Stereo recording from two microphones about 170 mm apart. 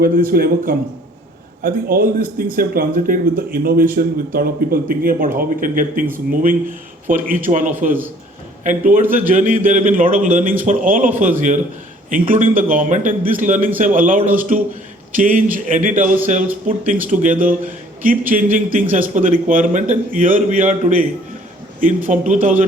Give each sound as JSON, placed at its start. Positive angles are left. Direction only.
{"t": 0.0, "sound": "a man's voice", "side_deg": -55}